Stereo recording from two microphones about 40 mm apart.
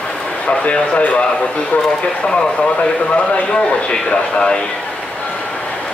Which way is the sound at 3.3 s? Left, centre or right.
Left.